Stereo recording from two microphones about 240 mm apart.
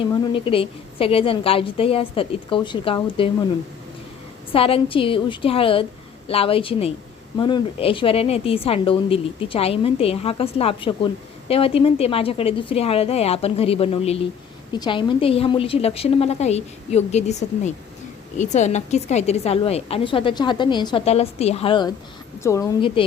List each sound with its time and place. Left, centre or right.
0.0 s a woman's voice: left
4.5 s a woman's voice: left
18.3 s a woman's voice: left